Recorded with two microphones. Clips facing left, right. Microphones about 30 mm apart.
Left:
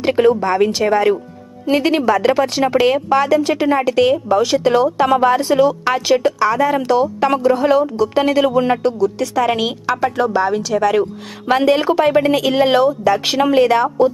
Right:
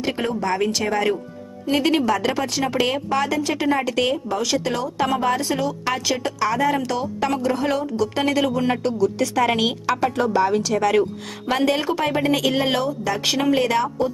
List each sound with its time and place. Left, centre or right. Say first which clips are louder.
0.2 s speech: left 11 dB; left
6.4 s a woman's voice: left 5 dB; centre
6.7 s speech: left 8 dB; centre
7.0 s speech: left 7 dB; left
7.4 s a woman's voice: left 8 dB; centre
11.5 s speech: left 7 dB; centre